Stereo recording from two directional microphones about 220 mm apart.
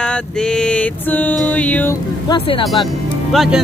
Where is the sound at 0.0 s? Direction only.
5° left (ahead or behind).